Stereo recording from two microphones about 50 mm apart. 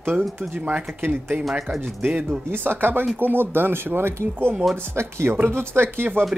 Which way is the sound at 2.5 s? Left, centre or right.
Right.